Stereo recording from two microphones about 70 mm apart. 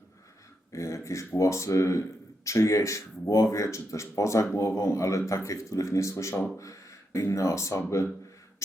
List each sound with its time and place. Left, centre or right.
0.7 s beatboxing: left
1.4 s speech: left